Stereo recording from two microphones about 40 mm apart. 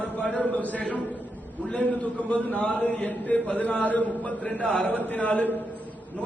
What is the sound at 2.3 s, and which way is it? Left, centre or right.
Speech, left.